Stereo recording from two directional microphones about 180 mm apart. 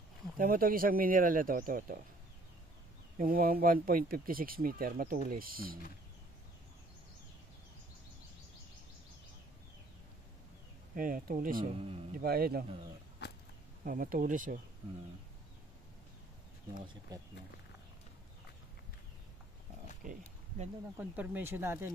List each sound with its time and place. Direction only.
0.4 s speech: 50° right (ahead or behind)
3.2 s speech: 50° right (ahead or behind)
11.0 s a man's voice: 50° right (ahead or behind)
13.8 s speech: 50° right (ahead or behind)
17.1 s speech: 20° right (ahead or behind)
20.1 s a sound: 40° right (ahead or behind)
20.9 s speech: 10° right (ahead or behind)